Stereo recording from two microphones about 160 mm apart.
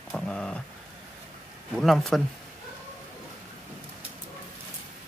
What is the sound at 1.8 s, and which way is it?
Speech, centre (ahead or behind).